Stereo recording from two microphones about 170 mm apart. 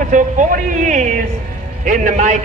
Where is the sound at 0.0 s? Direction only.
50° right (ahead or behind).